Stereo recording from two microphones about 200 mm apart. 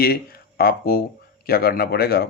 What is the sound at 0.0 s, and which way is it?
Speech, 50° left (ahead or behind).